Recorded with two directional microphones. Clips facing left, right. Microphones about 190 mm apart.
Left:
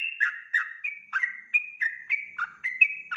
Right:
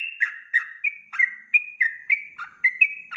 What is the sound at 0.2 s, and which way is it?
Bird, 10° right (ahead or behind).